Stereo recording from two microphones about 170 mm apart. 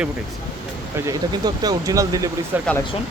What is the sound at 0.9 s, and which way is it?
Speech, 20° right (ahead or behind).